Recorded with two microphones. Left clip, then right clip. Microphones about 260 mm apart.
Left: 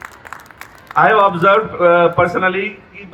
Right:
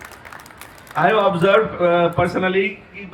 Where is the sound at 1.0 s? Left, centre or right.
Left.